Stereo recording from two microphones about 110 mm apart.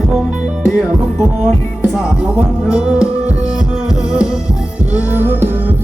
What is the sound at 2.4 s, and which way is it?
Music, 10° right (ahead or behind).